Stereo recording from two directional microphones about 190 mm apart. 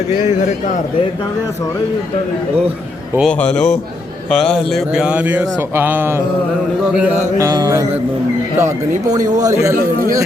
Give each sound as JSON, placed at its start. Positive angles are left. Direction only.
{"t": 3.2, "sound": "speech", "side_deg": 5}